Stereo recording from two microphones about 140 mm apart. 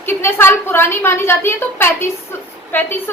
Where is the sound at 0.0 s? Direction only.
15° left (ahead or behind).